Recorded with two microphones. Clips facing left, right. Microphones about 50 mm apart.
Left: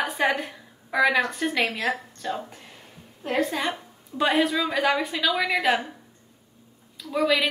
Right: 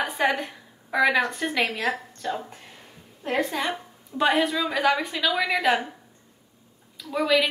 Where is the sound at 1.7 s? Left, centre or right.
Right.